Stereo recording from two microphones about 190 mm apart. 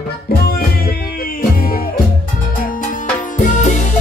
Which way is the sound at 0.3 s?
55° left (ahead or behind).